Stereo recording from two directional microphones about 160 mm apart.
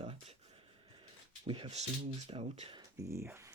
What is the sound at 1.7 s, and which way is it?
Speech, 45° right (ahead or behind).